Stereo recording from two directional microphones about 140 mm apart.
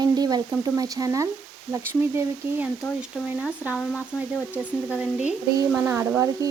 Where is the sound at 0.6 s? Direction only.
25° right (ahead or behind).